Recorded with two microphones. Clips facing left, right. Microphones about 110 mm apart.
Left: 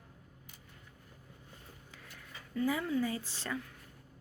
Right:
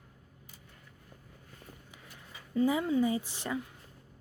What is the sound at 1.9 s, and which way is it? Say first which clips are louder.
Speech: right 1 dB; 20° right (ahead or behind).